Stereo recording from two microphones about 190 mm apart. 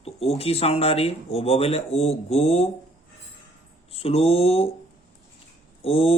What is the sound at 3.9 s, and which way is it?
Speech, 30° left (ahead or behind).